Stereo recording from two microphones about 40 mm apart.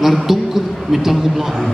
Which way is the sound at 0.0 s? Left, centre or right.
Centre.